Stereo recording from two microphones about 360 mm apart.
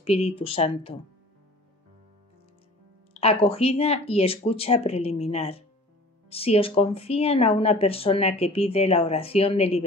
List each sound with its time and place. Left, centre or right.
0.0 s speech: centre
3.1 s speech: centre